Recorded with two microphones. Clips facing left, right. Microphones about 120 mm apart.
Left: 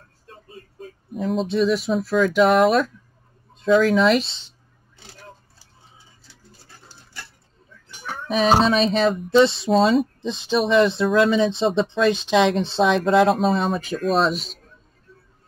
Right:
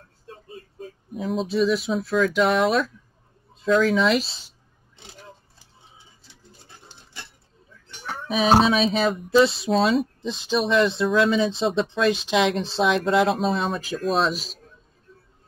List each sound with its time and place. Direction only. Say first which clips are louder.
1.1 s speech: left 2 dB; centre (ahead or behind)
4.9 s vehicle: left 1 dB; 20° right (ahead or behind)
6.5 s dog: even; 20° right (ahead or behind)
8.3 s speech: left 1 dB; 5° right (ahead or behind)